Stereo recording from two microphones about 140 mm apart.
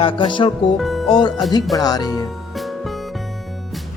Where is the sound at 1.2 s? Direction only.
30° left (ahead or behind).